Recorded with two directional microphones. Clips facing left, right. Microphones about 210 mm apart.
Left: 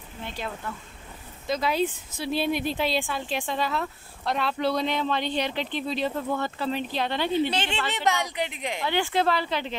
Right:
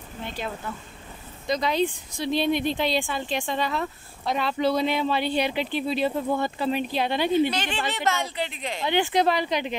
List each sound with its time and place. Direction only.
0.2 s speech: centre (ahead or behind)
7.9 s speech: 15° left (ahead or behind)
8.8 s a woman's voice: 20° right (ahead or behind)